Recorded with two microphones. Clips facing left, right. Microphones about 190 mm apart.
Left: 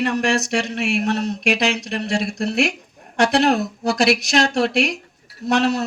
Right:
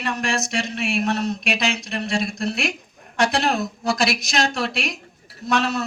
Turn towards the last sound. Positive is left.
turn(degrees=70)  # may be behind; listen again after turning